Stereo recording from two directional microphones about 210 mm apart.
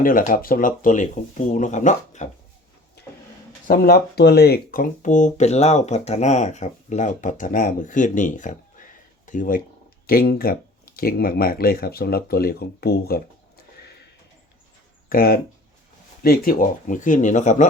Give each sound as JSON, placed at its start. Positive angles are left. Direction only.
{"t": 0.0, "sound": "speech", "side_deg": 40}
{"t": 3.7, "sound": "speech", "side_deg": 45}
{"t": 15.1, "sound": "speech", "side_deg": 45}